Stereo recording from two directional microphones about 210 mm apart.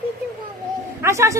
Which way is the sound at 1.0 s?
15° right (ahead or behind).